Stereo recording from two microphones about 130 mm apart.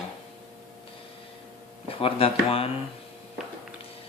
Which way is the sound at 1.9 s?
45° left (ahead or behind).